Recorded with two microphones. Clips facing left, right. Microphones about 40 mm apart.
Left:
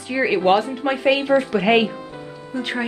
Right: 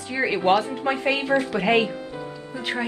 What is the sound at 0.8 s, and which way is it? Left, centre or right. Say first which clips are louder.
Speech: left 6 dB; centre.